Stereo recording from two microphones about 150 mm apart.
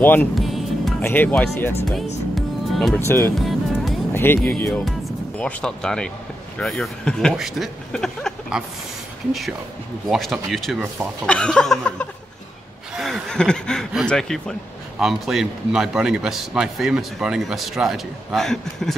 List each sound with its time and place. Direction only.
0.0 s speech: 10° left (ahead or behind)
0.4 s music: centre (ahead or behind)
1.0 s speech: 10° left (ahead or behind)
2.7 s speech: centre (ahead or behind)
3.3 s music: centre (ahead or behind)
4.1 s a man's voice: 15° left (ahead or behind)